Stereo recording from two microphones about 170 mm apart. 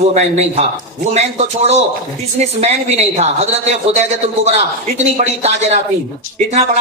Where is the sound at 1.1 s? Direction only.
40° right (ahead or behind).